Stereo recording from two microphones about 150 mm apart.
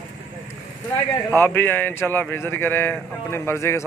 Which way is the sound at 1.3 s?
15° left (ahead or behind).